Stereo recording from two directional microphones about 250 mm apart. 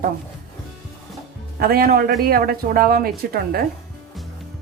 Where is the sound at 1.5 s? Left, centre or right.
Right.